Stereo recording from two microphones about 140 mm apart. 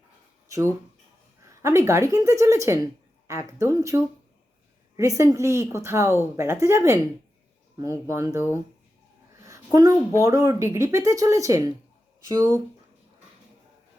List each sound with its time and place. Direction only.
0.4 s a sound: 20° right (ahead or behind)
1.5 s a woman's voice: 20° right (ahead or behind)
10.2 s a woman's voice: 20° right (ahead or behind)